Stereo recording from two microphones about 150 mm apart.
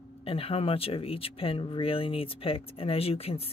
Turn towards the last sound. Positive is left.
turn(degrees=40)  # may be behind; listen again after turning